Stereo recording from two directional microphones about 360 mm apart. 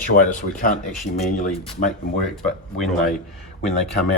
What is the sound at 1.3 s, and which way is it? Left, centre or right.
Speech, left.